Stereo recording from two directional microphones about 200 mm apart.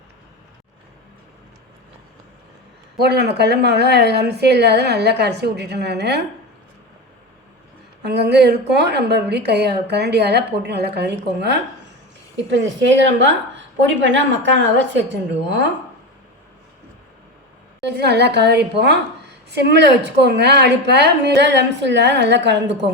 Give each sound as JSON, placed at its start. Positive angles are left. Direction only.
{"t": 3.0, "sound": "a woman's voice", "side_deg": -55}
{"t": 8.0, "sound": "a woman's voice", "side_deg": -55}
{"t": 17.8, "sound": "a woman's voice", "side_deg": -55}